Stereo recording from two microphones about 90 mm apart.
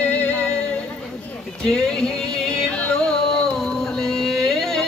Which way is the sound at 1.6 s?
10° left (ahead or behind).